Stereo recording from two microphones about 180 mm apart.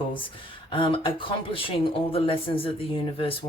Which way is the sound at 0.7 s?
30° left (ahead or behind).